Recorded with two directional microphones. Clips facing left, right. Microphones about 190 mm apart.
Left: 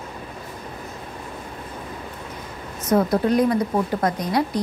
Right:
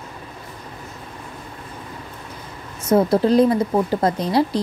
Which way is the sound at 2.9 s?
30° right (ahead or behind).